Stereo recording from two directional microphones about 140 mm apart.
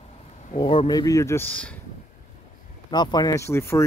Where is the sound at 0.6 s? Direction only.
35° left (ahead or behind); by 1.8 s 10° left (ahead or behind).